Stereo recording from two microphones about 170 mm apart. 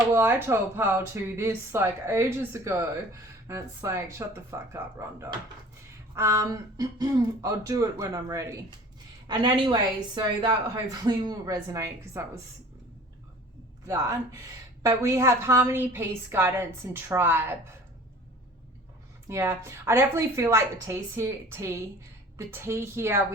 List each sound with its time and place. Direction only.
0.1 s speech: 15° right (ahead or behind)
13.8 s speech: 20° right (ahead or behind)
19.3 s speech: 15° right (ahead or behind)